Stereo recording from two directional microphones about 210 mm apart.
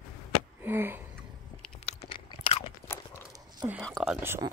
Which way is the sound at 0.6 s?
10° right (ahead or behind).